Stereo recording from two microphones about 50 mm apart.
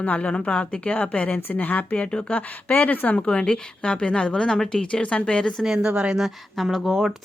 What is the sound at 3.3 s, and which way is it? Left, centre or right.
A woman's voice, left.